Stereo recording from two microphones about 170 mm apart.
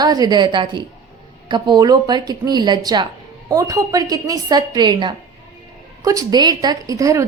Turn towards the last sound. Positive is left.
turn(degrees=-20)  # may be behind; listen again after turning